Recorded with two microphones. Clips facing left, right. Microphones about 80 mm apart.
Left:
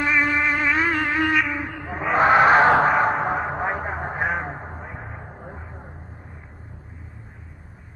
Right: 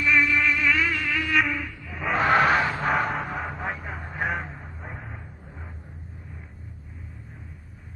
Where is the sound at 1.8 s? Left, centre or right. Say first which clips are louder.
Left 7 dB; left.